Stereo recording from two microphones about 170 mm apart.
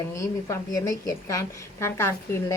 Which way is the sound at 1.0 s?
20° left (ahead or behind).